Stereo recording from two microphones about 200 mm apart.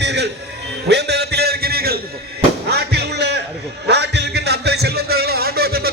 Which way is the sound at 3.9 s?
60° right (ahead or behind).